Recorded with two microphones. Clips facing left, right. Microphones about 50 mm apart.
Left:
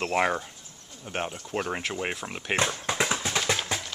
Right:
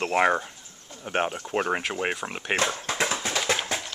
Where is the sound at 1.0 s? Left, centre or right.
Right.